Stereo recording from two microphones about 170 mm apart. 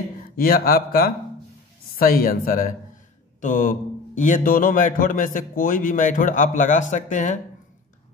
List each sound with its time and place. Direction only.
0.4 s a man's voice: 60° left (ahead or behind)